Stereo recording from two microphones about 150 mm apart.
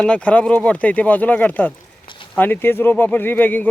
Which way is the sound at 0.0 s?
10° left (ahead or behind).